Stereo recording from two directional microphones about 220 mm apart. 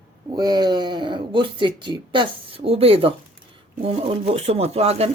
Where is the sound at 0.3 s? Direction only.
20° right (ahead or behind).